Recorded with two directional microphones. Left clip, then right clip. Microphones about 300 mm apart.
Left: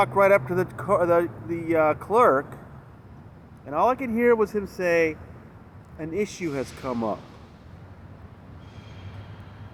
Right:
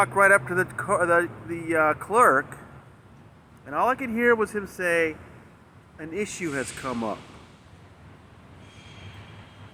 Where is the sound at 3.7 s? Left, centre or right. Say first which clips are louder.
Left 2 dB; right.